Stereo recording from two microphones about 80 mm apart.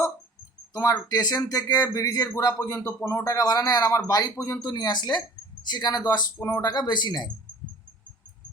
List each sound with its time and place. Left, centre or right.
0.7 s speech: left
2.7 s speech: left
3.3 s speech: left
4.4 s speech: left
4.7 s speech: left